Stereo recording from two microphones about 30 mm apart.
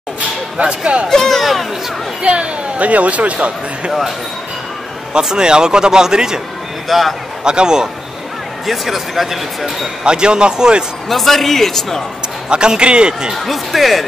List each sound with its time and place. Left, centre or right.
1.0 s speech: centre
2.2 s speech: right
2.8 s speech: right
5.1 s speech: right
6.9 s speech: centre
7.4 s speech: right
8.6 s speech: centre
10.0 s speech: right
11.1 s speech: centre
12.4 s speech: right
13.5 s speech: centre